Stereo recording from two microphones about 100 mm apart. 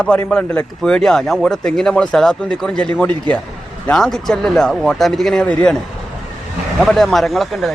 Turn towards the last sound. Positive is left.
turn(degrees=0)  # may be behind; listen again after turning